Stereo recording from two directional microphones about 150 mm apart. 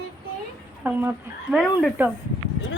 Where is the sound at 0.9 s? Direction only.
15° right (ahead or behind).